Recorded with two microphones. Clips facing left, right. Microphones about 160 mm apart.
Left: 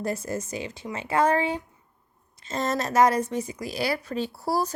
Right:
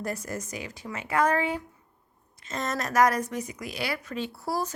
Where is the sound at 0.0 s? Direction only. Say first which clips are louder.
Left 4 dB; 25° left (ahead or behind).